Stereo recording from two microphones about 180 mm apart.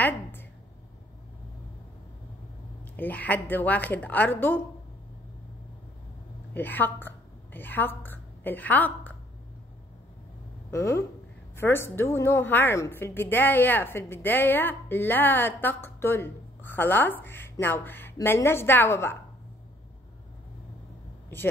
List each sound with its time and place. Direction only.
0.0 s a sound: 10° left (ahead or behind)
3.0 s a woman's voice: 10° left (ahead or behind)
6.5 s a woman's voice: 10° left (ahead or behind)
10.7 s a woman's voice: 15° left (ahead or behind)